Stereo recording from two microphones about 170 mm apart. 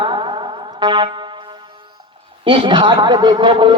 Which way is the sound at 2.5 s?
30° right (ahead or behind).